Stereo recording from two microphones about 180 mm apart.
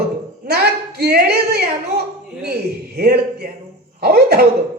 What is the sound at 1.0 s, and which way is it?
Speech, 60° right (ahead or behind).